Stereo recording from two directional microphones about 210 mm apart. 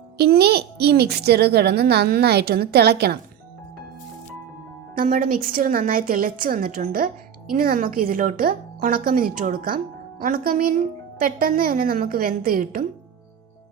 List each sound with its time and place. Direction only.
0.2 s a woman's voice: 50° right (ahead or behind)
4.9 s a woman's voice: 40° right (ahead or behind)